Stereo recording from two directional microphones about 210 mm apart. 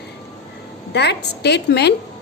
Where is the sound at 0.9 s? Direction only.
50° left (ahead or behind).